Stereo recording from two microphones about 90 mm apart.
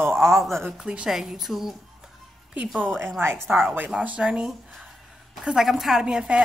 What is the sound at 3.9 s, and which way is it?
A woman's voice, 15° right (ahead or behind).